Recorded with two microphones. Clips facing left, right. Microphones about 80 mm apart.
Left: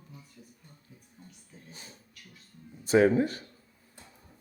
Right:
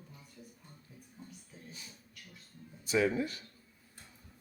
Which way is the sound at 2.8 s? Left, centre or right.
Left.